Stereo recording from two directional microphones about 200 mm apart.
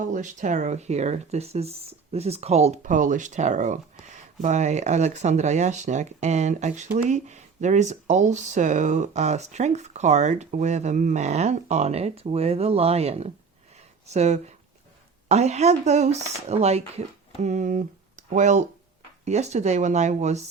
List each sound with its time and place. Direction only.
0.0 s speech: 40° right (ahead or behind)